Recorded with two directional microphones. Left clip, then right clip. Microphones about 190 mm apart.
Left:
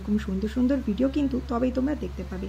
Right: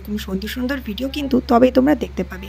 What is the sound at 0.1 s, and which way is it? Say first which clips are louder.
Speech: right 3 dB; 45° right (ahead or behind).